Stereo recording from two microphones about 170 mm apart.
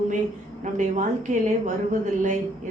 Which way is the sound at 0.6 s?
45° right (ahead or behind).